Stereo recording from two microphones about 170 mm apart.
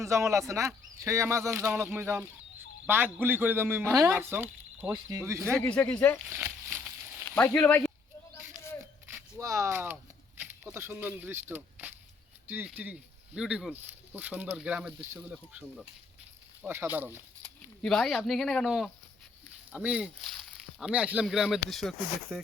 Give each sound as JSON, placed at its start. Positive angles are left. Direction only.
{"t": 0.0, "sound": "a man's voice", "side_deg": -15}
{"t": 5.5, "sound": "speech", "side_deg": 5}
{"t": 6.2, "sound": "a sound", "side_deg": -15}
{"t": 7.3, "sound": "speech", "side_deg": 10}
{"t": 8.8, "sound": "a sound", "side_deg": -15}
{"t": 10.6, "sound": "speech", "side_deg": -15}
{"t": 17.4, "sound": "speech", "side_deg": 5}